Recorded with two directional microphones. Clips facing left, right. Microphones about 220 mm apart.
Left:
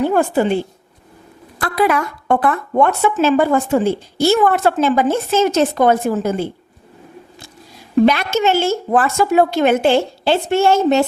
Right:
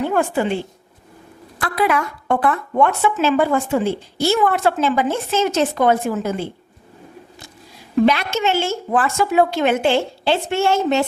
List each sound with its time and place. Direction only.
0.1 s a woman's voice: 40° left (ahead or behind)
1.5 s speech: 40° left (ahead or behind)
8.0 s speech: 45° left (ahead or behind)